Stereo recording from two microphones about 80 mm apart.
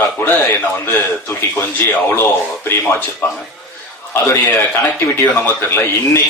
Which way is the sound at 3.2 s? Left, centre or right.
Left.